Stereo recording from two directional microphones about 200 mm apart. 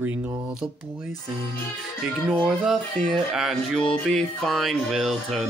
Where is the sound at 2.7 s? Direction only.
Centre (ahead or behind).